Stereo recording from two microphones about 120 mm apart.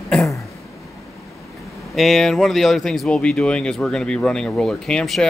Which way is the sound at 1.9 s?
Centre (ahead or behind).